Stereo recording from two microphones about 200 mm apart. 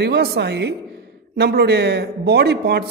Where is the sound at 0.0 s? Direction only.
55° right (ahead or behind).